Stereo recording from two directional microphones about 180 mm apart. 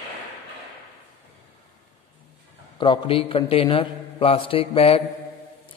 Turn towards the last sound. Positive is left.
turn(degrees=30)  # may be behind; listen again after turning